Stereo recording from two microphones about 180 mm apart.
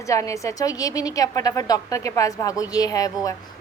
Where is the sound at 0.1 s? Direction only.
15° left (ahead or behind).